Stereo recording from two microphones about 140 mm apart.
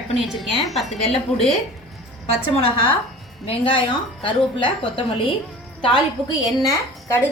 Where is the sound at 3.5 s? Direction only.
40° left (ahead or behind).